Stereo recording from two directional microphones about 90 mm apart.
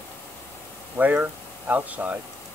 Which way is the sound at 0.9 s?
20° right (ahead or behind).